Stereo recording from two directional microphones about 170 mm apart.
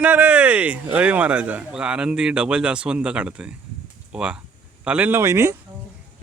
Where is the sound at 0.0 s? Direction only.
10° right (ahead or behind).